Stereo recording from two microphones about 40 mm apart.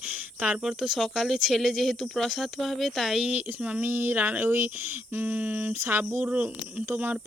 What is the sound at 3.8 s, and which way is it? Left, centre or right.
Speech, right.